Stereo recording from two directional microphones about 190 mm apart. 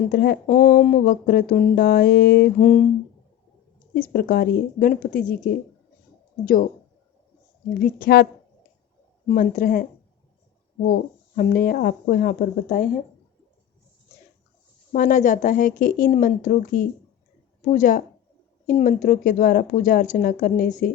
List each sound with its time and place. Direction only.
0.1 s speech: 55° left (ahead or behind)
2.6 s a sound: 40° left (ahead or behind)
3.9 s speech: 50° left (ahead or behind)
7.7 s speech: 50° left (ahead or behind)
11.3 s speech: 45° left (ahead or behind)
14.9 s speech: 45° left (ahead or behind)